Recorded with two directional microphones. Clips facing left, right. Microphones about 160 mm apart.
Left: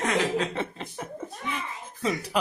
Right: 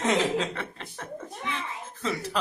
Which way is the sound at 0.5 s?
15° left (ahead or behind).